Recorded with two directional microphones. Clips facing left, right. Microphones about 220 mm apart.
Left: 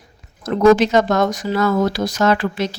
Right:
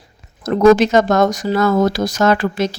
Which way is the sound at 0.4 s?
45° right (ahead or behind).